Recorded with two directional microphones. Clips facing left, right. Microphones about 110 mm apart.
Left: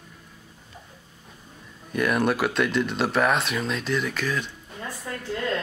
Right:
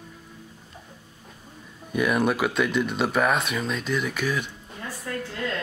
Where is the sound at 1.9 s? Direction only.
5° right (ahead or behind).